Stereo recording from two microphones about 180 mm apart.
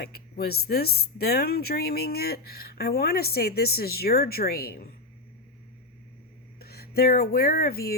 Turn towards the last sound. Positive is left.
turn(degrees=60)  # may be behind; listen again after turning